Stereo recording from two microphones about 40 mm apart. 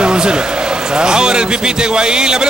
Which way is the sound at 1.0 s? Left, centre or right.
Centre.